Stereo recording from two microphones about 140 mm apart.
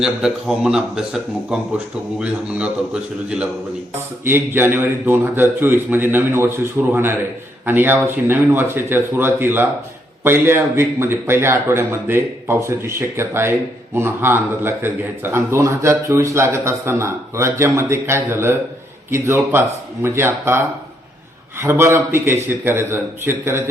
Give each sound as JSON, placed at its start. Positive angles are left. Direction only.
{"t": 0.0, "sound": "a man's voice", "side_deg": -5}
{"t": 21.6, "sound": "speech", "side_deg": -15}